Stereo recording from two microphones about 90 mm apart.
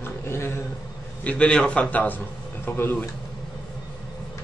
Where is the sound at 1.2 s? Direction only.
15° left (ahead or behind).